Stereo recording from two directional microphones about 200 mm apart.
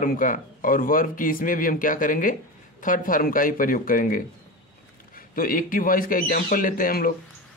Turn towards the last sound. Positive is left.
turn(degrees=45)  # may be behind; listen again after turning